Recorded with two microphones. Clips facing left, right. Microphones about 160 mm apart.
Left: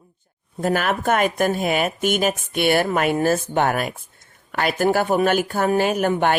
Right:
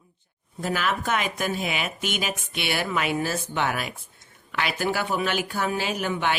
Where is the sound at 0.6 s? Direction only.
50° left (ahead or behind).